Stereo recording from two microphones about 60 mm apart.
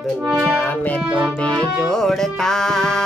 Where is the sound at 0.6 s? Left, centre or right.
Left.